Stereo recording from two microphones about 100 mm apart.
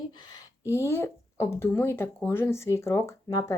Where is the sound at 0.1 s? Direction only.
45° left (ahead or behind).